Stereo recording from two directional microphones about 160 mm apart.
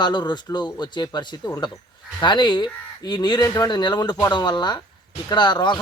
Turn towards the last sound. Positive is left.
turn(degrees=25)  # may be behind; listen again after turning